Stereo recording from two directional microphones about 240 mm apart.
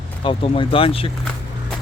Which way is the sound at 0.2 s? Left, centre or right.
Left.